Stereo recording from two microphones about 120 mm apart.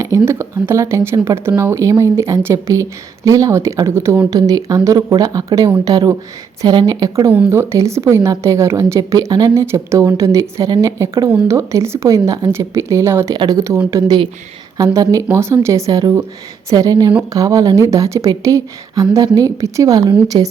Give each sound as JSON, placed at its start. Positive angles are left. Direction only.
{"t": 0.0, "sound": "a woman's voice", "side_deg": -20}
{"t": 4.4, "sound": "speech", "side_deg": -30}
{"t": 7.3, "sound": "a woman's voice", "side_deg": -20}
{"t": 14.8, "sound": "a woman's voice", "side_deg": -30}